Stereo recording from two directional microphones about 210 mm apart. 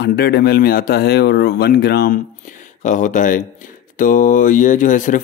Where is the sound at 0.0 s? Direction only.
50° left (ahead or behind).